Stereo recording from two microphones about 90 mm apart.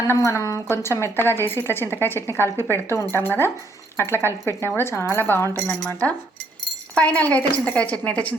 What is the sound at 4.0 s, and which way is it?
A woman's voice, 25° left (ahead or behind).